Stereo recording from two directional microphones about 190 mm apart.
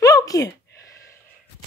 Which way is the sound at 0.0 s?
20° left (ahead or behind).